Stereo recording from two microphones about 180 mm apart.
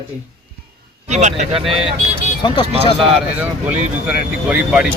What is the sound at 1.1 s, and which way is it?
Speech, 40° right (ahead or behind).